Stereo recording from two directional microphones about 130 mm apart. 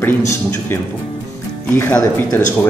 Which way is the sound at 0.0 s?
15° left (ahead or behind).